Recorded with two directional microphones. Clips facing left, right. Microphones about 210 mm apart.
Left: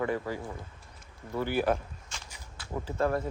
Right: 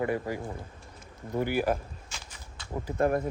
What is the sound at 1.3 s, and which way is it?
Speech, 15° right (ahead or behind).